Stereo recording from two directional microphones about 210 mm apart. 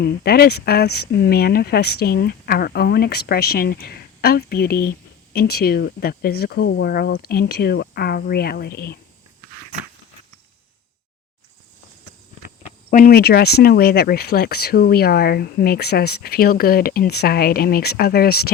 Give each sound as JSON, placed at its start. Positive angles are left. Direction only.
{"t": 0.0, "sound": "speech", "side_deg": 45}
{"t": 12.6, "sound": "speech", "side_deg": 40}